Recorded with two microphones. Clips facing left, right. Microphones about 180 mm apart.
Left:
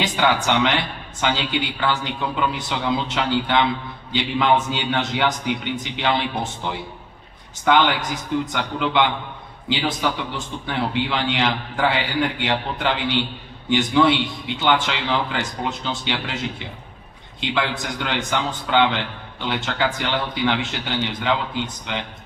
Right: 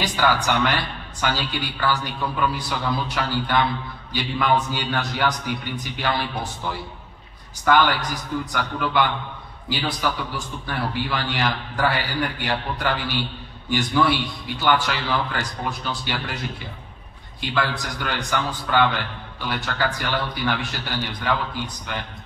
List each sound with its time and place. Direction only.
0.0 s a man's voice: 25° left (ahead or behind)